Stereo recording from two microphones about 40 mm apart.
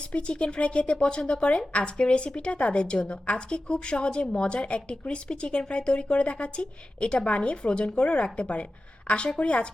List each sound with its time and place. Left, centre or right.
0.0 s speech: left